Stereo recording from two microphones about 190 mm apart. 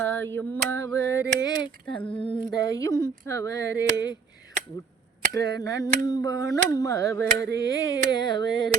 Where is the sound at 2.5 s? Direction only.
20° left (ahead or behind).